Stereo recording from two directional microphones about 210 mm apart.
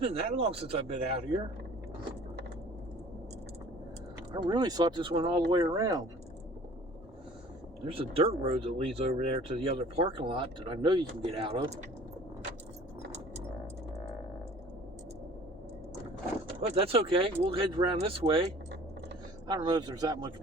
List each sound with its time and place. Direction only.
0.0 s speech: 30° right (ahead or behind)
4.3 s speech: 20° right (ahead or behind)
7.9 s speech: 25° right (ahead or behind)
16.5 s speech: 25° right (ahead or behind)
19.5 s speech: 20° right (ahead or behind)